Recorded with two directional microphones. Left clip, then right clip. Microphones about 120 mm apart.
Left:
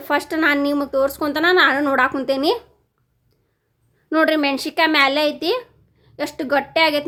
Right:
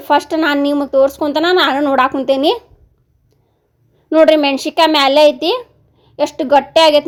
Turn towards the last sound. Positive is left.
turn(degrees=-25)  # may be behind; listen again after turning